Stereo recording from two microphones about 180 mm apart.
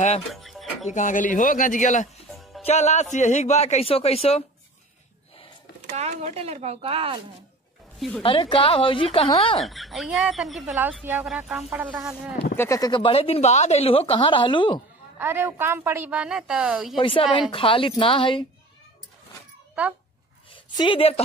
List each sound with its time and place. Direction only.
0.3 s music: centre (ahead or behind)
0.8 s a man's voice: 45° left (ahead or behind)
5.9 s speech: 40° right (ahead or behind)
8.2 s a man's voice: 30° left (ahead or behind)
9.7 s speech: centre (ahead or behind)
12.4 s speech: 15° left (ahead or behind)
15.1 s a woman's voice: 10° right (ahead or behind)
17.0 s speech: 30° left (ahead or behind)
20.5 s a woman's voice: 25° left (ahead or behind)